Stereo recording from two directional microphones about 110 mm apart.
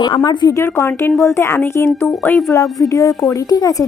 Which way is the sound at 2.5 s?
30° left (ahead or behind).